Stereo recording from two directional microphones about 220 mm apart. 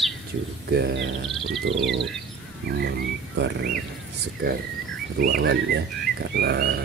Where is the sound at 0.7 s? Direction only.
50° right (ahead or behind).